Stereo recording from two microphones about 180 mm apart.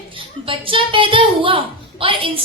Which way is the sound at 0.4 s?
30° right (ahead or behind).